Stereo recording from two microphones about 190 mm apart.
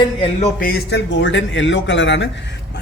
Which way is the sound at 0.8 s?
70° left (ahead or behind).